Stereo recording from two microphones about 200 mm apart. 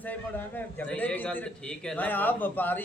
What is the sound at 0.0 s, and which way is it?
A man's voice, 10° left (ahead or behind).